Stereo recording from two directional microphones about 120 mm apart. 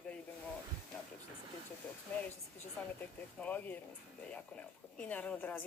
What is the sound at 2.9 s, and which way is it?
Speech, 15° left (ahead or behind).